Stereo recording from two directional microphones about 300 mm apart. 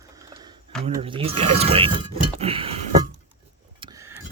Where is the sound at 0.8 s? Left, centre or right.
Centre.